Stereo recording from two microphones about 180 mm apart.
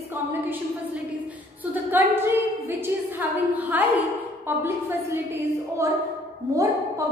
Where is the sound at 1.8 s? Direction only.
10° right (ahead or behind).